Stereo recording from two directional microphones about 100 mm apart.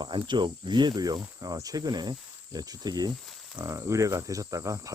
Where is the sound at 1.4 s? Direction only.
35° right (ahead or behind).